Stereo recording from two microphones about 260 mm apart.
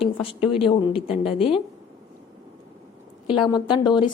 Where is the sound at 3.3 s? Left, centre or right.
Centre.